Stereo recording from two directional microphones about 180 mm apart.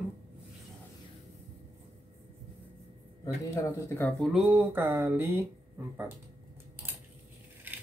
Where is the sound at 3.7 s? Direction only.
15° left (ahead or behind).